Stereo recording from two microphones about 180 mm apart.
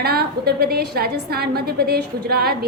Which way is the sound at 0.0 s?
60° right (ahead or behind).